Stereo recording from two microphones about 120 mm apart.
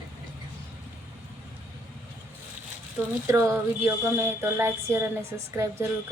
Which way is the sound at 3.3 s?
20° right (ahead or behind).